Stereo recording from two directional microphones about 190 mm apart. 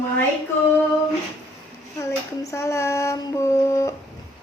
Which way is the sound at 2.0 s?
15° left (ahead or behind).